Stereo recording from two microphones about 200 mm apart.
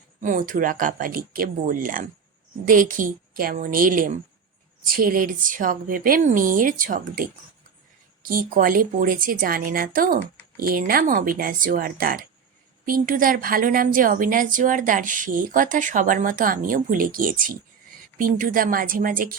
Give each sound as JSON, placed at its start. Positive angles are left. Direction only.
{"t": 0.2, "sound": "a woman's voice", "side_deg": -40}